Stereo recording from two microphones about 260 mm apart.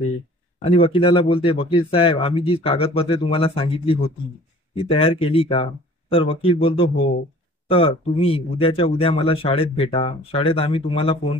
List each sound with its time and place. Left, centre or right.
0.7 s speech: left